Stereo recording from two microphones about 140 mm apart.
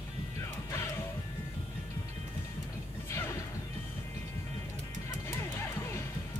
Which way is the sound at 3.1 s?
15° left (ahead or behind).